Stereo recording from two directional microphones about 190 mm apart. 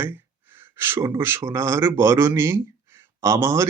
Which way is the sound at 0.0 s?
10° right (ahead or behind).